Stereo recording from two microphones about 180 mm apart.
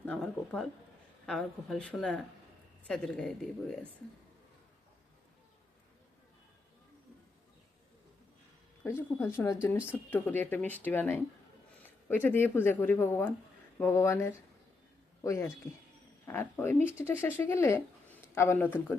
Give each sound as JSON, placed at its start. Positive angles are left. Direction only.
{"t": 0.0, "sound": "a woman's voice", "side_deg": 5}
{"t": 8.8, "sound": "speech", "side_deg": 10}